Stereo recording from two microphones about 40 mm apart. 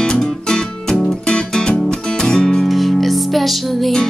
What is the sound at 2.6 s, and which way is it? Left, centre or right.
Music, centre.